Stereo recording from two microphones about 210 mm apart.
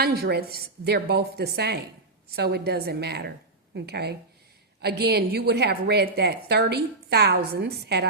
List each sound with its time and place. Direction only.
0.0 s a woman's voice: 50° right (ahead or behind)